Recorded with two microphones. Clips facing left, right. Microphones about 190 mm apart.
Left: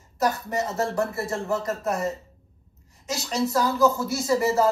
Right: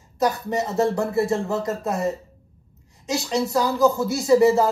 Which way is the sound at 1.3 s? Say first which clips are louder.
Right 4 dB; 20° right (ahead or behind).